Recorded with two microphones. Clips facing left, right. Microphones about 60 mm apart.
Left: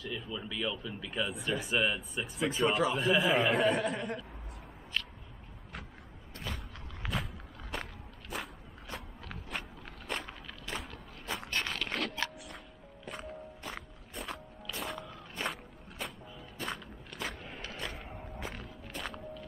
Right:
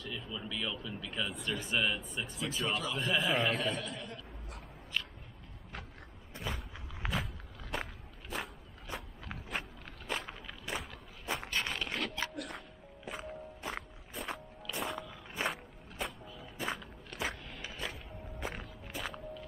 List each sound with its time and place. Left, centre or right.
0.0 s speech: centre
3.6 s speech: left
6.3 s walk: centre
11.5 s a sound: centre
12.4 s music: centre
14.7 s walk: centre